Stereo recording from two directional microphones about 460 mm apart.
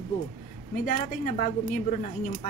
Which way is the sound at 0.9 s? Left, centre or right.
Centre.